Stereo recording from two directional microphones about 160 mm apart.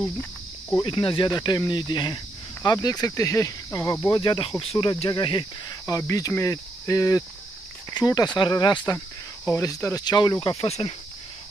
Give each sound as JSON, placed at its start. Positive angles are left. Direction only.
{"t": 0.0, "sound": "cricket", "side_deg": 10}
{"t": 0.8, "sound": "speech", "side_deg": 35}
{"t": 8.9, "sound": "speech", "side_deg": 15}
{"t": 10.6, "sound": "speech", "side_deg": 35}